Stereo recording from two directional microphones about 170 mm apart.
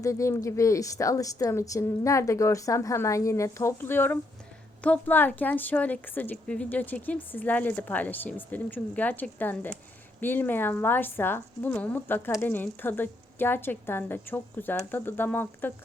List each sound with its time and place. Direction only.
0.0 s speech: 20° left (ahead or behind)